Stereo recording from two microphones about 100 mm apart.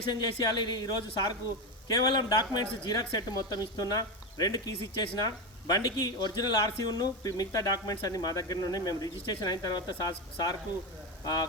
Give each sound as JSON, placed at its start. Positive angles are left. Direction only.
{"t": 0.1, "sound": "speech", "side_deg": 45}